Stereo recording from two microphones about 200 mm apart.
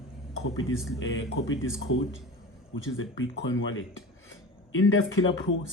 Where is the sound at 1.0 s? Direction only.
65° left (ahead or behind).